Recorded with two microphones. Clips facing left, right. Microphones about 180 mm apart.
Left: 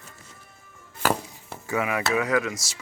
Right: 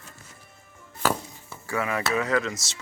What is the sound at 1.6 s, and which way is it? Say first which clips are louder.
Speech: left 2 dB; 15° left (ahead or behind).